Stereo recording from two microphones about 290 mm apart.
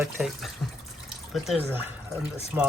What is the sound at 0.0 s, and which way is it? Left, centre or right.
Speech, centre.